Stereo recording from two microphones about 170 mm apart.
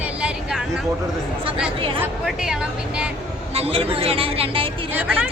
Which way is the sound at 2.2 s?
5° right (ahead or behind).